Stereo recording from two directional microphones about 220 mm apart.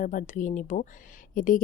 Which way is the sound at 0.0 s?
35° left (ahead or behind).